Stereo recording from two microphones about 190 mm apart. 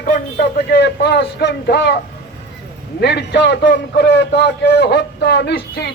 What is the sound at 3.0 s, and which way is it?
A man's voice, 65° left (ahead or behind).